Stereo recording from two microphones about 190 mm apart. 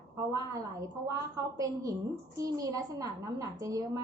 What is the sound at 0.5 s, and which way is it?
A woman's voice, 15° right (ahead or behind).